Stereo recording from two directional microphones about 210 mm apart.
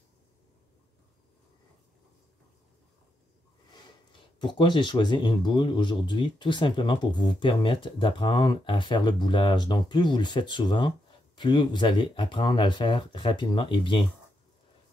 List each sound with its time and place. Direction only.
4.4 s speech: 20° left (ahead or behind)